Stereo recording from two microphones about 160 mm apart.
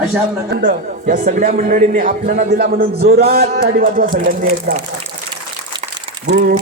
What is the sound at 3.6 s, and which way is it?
Speech, 70° right (ahead or behind).